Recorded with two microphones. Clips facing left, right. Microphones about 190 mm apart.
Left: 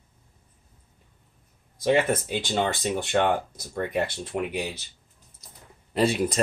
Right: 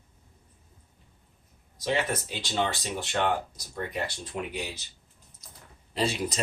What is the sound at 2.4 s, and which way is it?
Speech, 50° left (ahead or behind).